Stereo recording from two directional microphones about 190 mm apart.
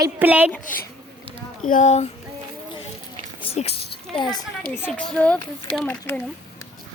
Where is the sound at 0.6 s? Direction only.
45° left (ahead or behind).